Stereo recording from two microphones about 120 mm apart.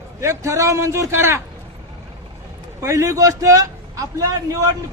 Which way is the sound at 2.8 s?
25° right (ahead or behind).